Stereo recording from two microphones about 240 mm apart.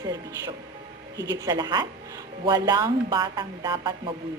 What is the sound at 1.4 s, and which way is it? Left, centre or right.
A woman's voice, centre.